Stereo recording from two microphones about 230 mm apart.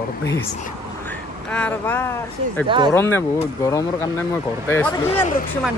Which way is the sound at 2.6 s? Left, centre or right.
Centre.